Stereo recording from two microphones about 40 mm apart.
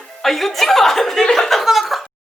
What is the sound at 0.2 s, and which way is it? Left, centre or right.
Speech, centre.